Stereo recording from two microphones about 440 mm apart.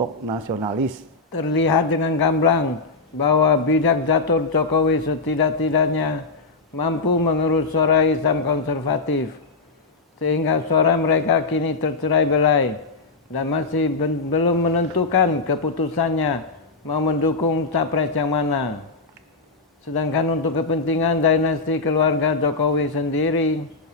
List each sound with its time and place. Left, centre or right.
1.3 s a man's voice: left
10.2 s a man's voice: left
19.9 s speech: left